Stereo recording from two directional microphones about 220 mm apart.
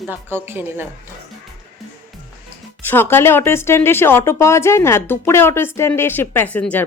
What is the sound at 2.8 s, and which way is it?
Speech, 10° left (ahead or behind).